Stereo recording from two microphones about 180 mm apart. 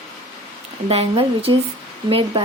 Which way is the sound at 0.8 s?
35° right (ahead or behind).